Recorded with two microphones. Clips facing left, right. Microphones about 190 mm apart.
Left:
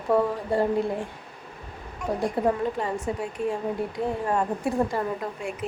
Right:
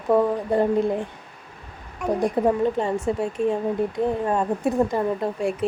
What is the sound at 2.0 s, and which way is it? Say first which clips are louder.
Speech: right 4 dB; 60° right (ahead or behind).